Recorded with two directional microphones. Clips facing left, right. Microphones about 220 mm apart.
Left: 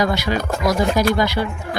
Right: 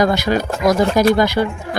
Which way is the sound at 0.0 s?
45° right (ahead or behind).